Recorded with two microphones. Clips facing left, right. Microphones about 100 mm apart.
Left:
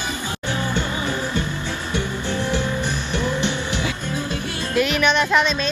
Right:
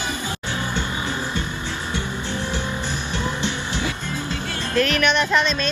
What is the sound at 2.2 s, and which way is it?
Music, 15° right (ahead or behind).